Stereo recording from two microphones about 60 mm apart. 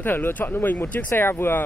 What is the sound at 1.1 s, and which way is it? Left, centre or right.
Speech, left.